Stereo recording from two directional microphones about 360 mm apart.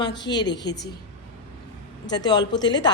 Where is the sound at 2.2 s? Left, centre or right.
Centre.